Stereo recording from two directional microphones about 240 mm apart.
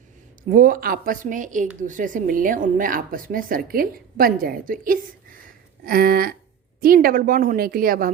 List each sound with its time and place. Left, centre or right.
0.5 s a woman's voice: right